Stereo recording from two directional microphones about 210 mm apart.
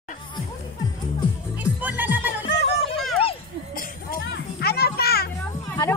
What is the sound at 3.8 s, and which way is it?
Music, 45° left (ahead or behind).